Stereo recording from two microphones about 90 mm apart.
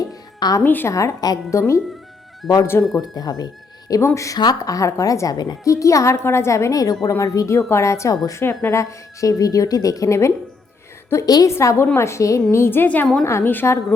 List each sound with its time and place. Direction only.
0.1 s music: 45° left (ahead or behind)
0.6 s a woman's voice: 20° left (ahead or behind)
0.9 s a woman's voice: 40° left (ahead or behind)
2.4 s speech: centre (ahead or behind)
2.9 s speech: 45° left (ahead or behind)
4.0 s a woman's voice: 35° left (ahead or behind)
4.4 s a woman's voice: 45° left (ahead or behind)
5.6 s a woman's voice: 35° left (ahead or behind)
8.4 s a woman's voice: 25° left (ahead or behind)